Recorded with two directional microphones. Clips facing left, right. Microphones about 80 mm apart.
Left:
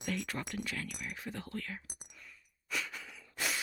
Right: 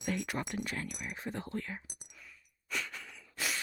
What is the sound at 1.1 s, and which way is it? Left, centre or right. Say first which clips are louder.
Speech: right 5 dB; right.